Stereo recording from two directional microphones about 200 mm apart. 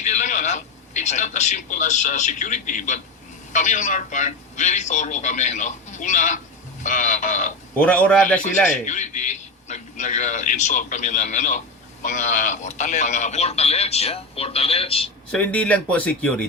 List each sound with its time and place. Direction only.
0.0 s a man's voice: 35° left (ahead or behind)
7.8 s a man's voice: 5° left (ahead or behind)
8.4 s a man's voice: 40° left (ahead or behind)
15.3 s speech: 5° left (ahead or behind)